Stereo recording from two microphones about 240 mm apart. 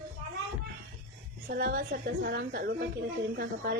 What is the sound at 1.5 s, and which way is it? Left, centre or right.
A woman's voice, right.